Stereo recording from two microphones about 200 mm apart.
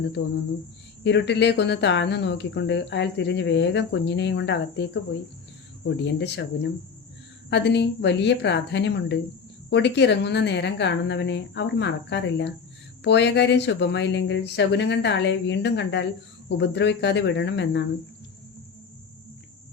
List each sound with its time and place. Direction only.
0.2 s speech: 60° left (ahead or behind)